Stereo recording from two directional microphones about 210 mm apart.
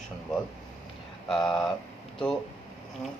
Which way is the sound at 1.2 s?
Centre (ahead or behind).